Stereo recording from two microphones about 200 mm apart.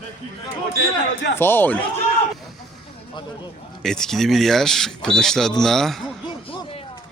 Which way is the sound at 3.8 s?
Centre (ahead or behind).